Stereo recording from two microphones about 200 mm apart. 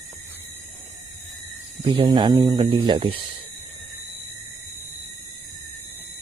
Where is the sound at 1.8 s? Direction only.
20° right (ahead or behind).